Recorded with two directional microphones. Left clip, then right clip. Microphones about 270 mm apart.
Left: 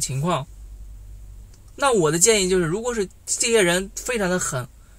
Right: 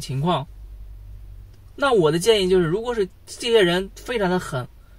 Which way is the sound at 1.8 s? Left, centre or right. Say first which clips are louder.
Right 1 dB; centre.